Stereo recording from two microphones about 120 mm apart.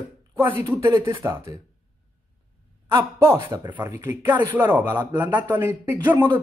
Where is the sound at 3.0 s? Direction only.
20° right (ahead or behind).